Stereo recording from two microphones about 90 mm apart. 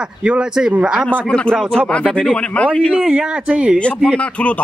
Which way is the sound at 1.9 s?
10° left (ahead or behind).